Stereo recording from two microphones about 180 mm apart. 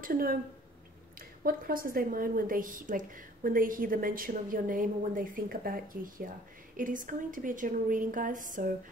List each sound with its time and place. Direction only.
0.0 s a woman's voice: 55° right (ahead or behind)
1.4 s a woman's voice: 55° right (ahead or behind)